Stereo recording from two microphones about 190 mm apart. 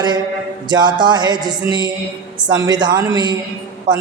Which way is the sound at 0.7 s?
20° right (ahead or behind).